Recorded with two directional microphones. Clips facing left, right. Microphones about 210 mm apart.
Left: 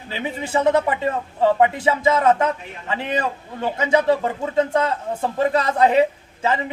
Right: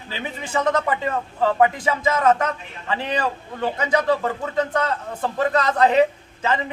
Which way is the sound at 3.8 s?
25° left (ahead or behind).